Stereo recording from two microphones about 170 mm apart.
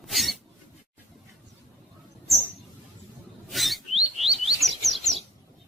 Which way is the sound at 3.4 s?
Centre (ahead or behind).